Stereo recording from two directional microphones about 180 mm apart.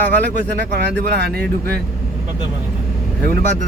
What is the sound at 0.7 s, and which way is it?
Speech, 65° right (ahead or behind).